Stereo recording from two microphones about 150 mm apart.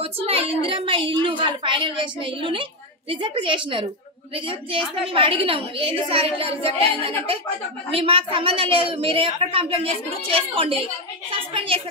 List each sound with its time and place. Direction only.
0.0 s a woman's voice: 40° right (ahead or behind)